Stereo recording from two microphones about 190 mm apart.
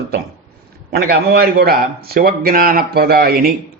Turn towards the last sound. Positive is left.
turn(degrees=-55)  # may be behind; listen again after turning